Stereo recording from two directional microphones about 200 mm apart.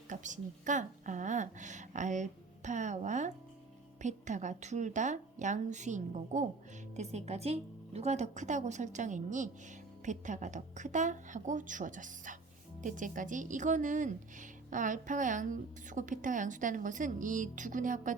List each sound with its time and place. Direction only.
0.1 s a woman's voice: 40° right (ahead or behind)